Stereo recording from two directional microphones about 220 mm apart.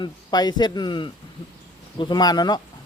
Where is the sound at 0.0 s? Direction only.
20° left (ahead or behind).